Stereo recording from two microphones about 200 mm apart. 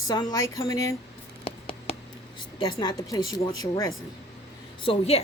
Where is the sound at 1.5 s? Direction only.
25° left (ahead or behind).